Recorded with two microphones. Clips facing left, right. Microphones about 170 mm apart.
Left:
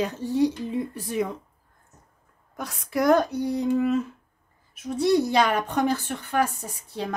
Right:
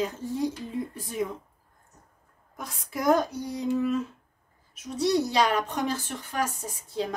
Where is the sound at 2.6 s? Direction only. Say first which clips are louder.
Left 8 dB; 75° left (ahead or behind).